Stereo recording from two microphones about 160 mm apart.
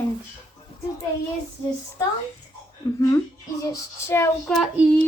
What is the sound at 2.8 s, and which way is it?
A woman's voice, 20° left (ahead or behind).